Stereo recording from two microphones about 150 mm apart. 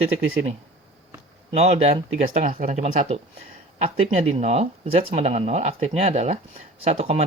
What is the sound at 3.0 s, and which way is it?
Speech, 40° right (ahead or behind).